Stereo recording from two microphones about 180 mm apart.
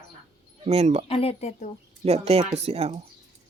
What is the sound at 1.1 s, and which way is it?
Speech, 35° left (ahead or behind).